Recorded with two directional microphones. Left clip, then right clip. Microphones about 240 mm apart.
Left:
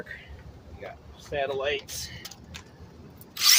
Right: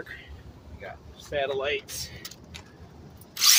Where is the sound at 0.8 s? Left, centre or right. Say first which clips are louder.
Even; centre.